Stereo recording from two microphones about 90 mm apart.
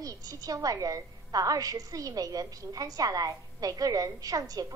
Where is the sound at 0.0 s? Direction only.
40° right (ahead or behind).